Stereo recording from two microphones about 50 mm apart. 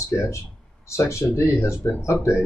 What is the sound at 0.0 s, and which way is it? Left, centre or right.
Speech, left.